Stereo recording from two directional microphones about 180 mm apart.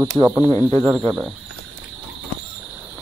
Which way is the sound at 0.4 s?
10° left (ahead or behind).